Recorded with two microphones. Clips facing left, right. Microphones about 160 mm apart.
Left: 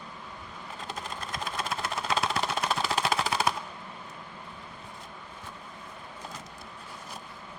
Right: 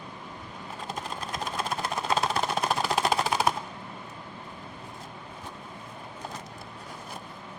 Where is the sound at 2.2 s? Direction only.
40° right (ahead or behind).